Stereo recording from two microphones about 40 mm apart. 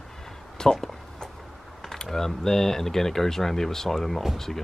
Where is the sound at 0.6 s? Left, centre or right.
Centre.